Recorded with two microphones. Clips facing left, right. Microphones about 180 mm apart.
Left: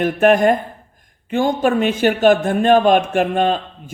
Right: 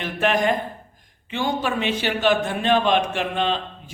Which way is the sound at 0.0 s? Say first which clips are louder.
Left 8 dB; 50° left (ahead or behind).